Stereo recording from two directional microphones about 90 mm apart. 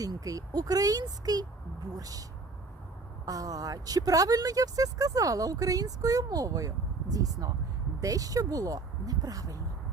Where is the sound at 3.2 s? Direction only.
40° right (ahead or behind).